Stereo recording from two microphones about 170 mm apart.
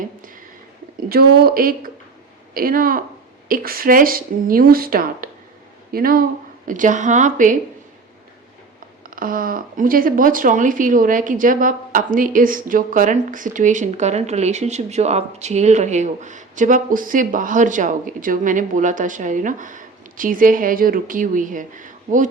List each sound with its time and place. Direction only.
0.9 s speech: 60° right (ahead or behind)
9.0 s speech: 55° right (ahead or behind)